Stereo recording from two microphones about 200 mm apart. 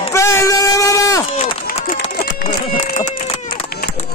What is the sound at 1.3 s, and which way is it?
Run, 30° left (ahead or behind).